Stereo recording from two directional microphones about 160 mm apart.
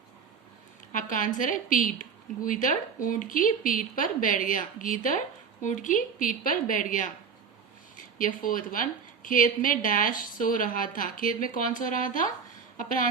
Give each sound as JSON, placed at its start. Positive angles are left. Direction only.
{"t": 0.9, "sound": "a woman's voice", "side_deg": 55}
{"t": 8.2, "sound": "a woman's voice", "side_deg": 60}